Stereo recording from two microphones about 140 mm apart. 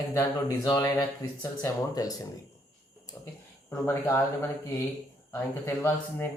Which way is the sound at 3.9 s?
15° left (ahead or behind).